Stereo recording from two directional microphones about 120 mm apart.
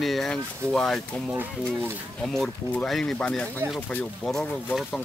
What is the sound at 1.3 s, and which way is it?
Speech, 15° right (ahead or behind).